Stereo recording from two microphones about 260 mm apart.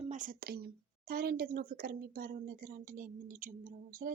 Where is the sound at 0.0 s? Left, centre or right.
Right.